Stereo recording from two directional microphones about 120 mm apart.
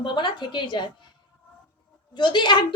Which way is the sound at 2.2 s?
40° left (ahead or behind).